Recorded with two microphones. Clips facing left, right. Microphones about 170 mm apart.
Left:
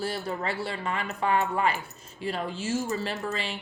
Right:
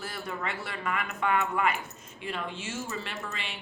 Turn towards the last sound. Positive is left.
turn(degrees=35)  # may be behind; listen again after turning